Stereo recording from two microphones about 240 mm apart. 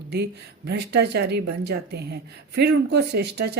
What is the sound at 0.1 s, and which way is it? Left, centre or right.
Speech, right.